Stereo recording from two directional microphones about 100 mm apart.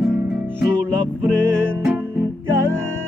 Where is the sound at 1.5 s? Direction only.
20° right (ahead or behind).